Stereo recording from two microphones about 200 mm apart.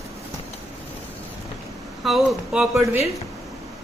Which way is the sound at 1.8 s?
Centre (ahead or behind).